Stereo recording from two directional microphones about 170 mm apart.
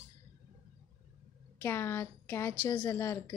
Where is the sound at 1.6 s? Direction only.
15° left (ahead or behind).